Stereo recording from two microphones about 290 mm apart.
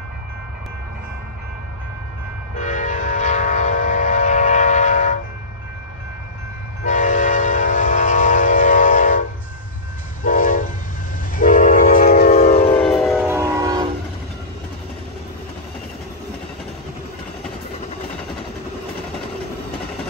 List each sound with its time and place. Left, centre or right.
2.6 s train: left
6.8 s train: left
10.2 s train: left
12.7 s train: centre